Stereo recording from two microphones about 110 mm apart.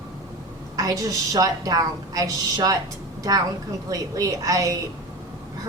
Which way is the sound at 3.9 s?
30° right (ahead or behind).